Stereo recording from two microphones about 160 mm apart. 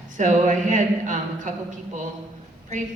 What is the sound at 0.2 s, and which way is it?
A man's voice, 50° right (ahead or behind).